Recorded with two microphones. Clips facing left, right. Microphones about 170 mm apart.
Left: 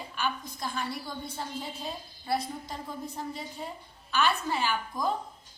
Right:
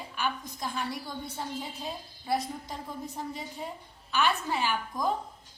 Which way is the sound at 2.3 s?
20° right (ahead or behind).